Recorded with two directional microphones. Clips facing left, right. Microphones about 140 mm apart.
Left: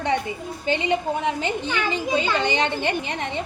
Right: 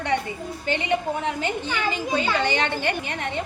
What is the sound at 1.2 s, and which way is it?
A woman's voice, 20° left (ahead or behind).